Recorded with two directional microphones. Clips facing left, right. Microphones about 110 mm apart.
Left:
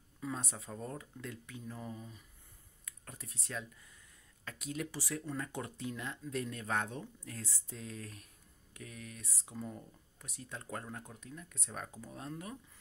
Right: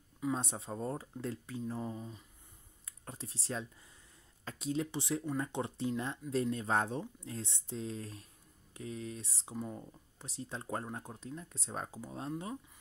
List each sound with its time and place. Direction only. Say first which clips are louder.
0.2 s speech: right 5 dB; 25° right (ahead or behind)